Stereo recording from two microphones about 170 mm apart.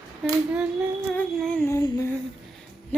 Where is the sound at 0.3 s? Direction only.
5° right (ahead or behind).